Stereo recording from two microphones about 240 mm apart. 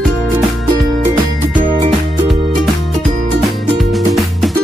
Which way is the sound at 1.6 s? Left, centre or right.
Right.